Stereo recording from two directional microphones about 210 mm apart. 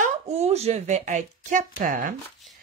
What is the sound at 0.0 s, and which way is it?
A woman's voice, 30° right (ahead or behind).